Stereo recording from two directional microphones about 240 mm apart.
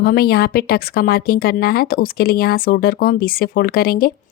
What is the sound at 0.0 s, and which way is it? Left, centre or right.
Speech, left.